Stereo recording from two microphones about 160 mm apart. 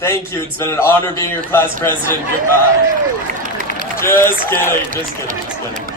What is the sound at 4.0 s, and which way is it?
Speech, 15° left (ahead or behind).